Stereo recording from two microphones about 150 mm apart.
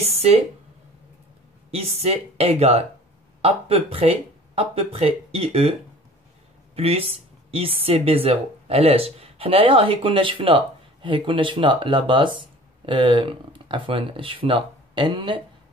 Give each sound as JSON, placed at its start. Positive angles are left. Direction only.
{"t": 1.7, "sound": "a woman's voice", "side_deg": -45}